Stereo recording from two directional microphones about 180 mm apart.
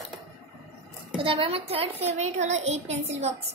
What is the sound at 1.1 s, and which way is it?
A woman's voice, 30° right (ahead or behind).